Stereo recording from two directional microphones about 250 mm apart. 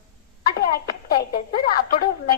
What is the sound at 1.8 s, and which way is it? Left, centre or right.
Speech, left.